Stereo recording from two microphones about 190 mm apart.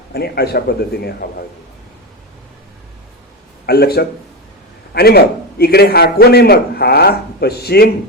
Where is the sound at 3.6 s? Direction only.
55° left (ahead or behind).